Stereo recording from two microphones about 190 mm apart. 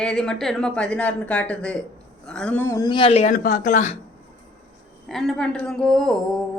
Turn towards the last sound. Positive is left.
turn(degrees=0)  # may be behind; listen again after turning